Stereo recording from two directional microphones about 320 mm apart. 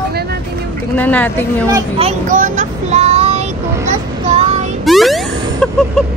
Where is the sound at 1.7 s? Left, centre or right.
Centre.